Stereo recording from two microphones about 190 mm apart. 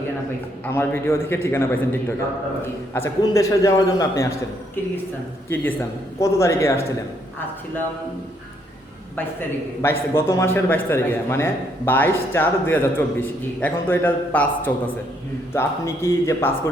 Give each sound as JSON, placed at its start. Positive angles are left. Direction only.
{"t": 0.6, "sound": "a man's voice", "side_deg": 10}
{"t": 6.1, "sound": "a man's voice", "side_deg": 15}
{"t": 9.8, "sound": "a man's voice", "side_deg": 15}